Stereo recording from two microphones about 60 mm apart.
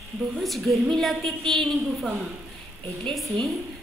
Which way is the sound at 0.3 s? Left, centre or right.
Centre.